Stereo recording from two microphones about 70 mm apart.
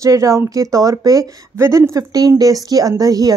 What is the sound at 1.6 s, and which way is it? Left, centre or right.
Speech, right.